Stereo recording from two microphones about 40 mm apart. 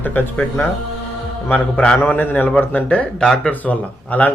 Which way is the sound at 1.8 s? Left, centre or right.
Left.